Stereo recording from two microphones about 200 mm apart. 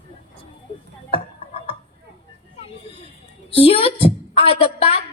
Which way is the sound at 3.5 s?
30° left (ahead or behind).